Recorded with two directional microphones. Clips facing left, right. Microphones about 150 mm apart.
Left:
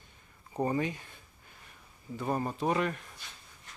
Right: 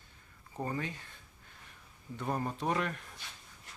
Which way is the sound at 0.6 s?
15° left (ahead or behind).